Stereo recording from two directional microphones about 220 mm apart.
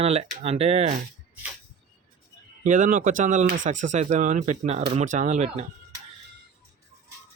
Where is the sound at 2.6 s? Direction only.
35° right (ahead or behind).